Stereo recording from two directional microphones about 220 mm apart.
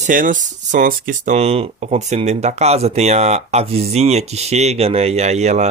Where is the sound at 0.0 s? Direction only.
35° right (ahead or behind).